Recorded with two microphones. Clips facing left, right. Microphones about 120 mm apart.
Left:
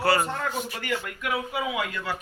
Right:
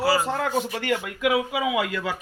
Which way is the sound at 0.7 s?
90° right.